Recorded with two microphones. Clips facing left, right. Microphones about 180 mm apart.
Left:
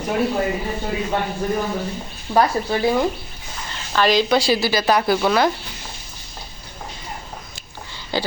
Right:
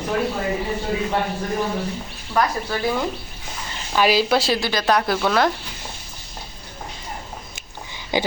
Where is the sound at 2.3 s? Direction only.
25° left (ahead or behind).